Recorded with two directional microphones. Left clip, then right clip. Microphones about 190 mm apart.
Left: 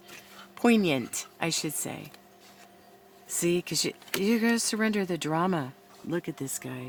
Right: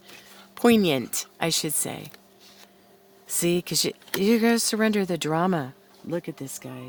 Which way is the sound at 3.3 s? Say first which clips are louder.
Right 3 dB; 40° right (ahead or behind).